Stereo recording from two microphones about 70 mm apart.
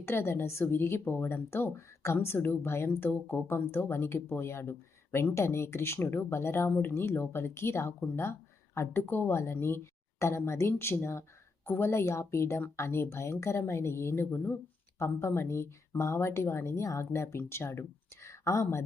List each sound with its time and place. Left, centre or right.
0.0 s speech: left
3.1 s speech: left